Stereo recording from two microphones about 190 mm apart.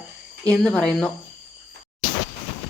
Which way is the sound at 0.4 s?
5° left (ahead or behind).